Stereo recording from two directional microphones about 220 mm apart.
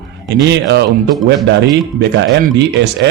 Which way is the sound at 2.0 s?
55° right (ahead or behind).